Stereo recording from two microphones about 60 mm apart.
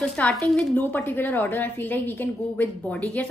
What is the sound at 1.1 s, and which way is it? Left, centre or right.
A woman's voice, left.